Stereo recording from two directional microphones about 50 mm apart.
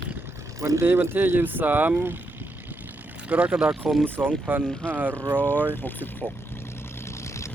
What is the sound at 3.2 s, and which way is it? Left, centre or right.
Speech, right.